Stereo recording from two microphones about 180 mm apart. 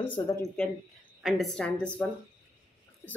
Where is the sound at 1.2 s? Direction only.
Centre (ahead or behind).